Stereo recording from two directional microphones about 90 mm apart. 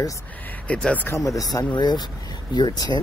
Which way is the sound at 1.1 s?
40° left (ahead or behind).